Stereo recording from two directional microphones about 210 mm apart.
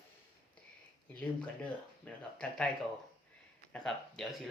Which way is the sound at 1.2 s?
5° left (ahead or behind).